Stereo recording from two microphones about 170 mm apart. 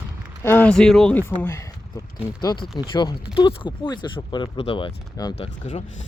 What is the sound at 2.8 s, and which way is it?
Speech, 25° left (ahead or behind).